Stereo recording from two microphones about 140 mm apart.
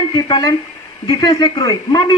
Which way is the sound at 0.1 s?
30° left (ahead or behind).